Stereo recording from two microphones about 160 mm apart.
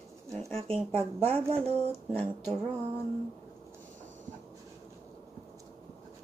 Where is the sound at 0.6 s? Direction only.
35° right (ahead or behind).